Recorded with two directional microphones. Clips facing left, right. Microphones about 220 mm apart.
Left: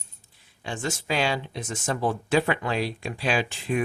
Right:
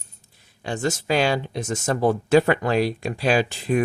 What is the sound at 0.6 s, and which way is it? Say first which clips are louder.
Speech: right 6 dB; 40° right (ahead or behind).